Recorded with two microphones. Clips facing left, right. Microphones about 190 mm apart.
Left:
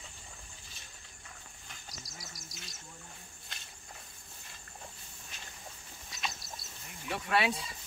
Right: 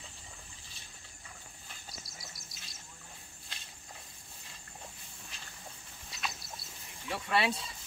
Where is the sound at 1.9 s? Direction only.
25° right (ahead or behind).